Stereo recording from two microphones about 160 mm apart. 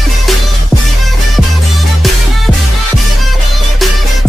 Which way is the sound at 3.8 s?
Centre (ahead or behind).